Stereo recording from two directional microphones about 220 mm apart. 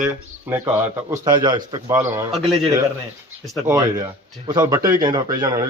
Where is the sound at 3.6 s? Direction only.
10° right (ahead or behind).